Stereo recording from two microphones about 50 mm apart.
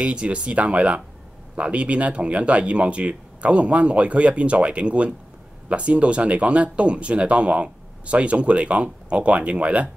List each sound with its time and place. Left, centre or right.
0.0 s speech: right